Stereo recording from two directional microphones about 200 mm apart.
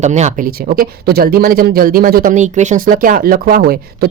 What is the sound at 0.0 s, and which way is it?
Speech, 35° right (ahead or behind).